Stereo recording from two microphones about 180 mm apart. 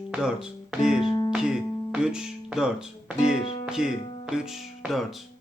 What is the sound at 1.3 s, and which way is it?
Speech, 5° right (ahead or behind).